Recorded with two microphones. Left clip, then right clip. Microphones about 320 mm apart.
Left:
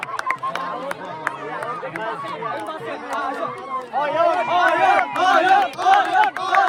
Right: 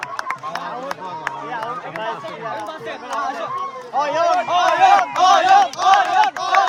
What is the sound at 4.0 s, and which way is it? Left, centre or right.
Crowd, right.